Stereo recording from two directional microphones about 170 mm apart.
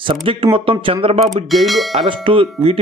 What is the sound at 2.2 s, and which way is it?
Speech, 30° right (ahead or behind).